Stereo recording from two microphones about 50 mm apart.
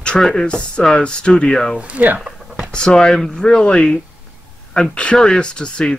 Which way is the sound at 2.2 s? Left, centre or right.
Centre.